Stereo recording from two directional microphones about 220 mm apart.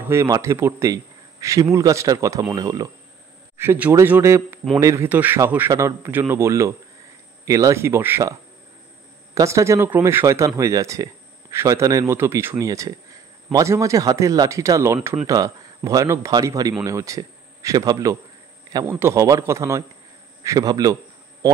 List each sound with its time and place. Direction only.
0.1 s a man's voice: 15° right (ahead or behind)
15.0 s speech: centre (ahead or behind)
15.2 s a man's voice: 15° right (ahead or behind)
20.4 s a sound: 15° right (ahead or behind)